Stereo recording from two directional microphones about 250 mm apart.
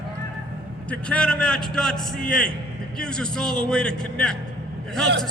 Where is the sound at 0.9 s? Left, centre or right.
Centre.